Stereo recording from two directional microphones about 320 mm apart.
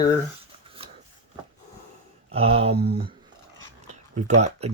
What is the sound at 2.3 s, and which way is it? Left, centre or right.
Speech, centre.